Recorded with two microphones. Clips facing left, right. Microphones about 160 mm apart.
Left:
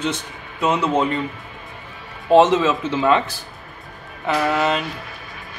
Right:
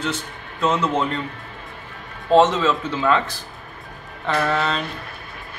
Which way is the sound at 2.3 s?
15° left (ahead or behind).